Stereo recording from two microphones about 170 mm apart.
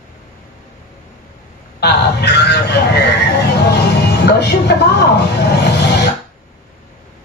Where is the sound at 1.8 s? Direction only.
75° left (ahead or behind).